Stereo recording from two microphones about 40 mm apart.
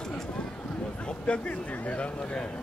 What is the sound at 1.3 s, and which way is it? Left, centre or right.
Speech, left.